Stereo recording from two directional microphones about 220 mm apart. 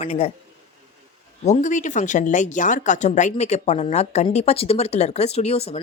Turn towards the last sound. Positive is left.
turn(degrees=30)  # may be behind; listen again after turning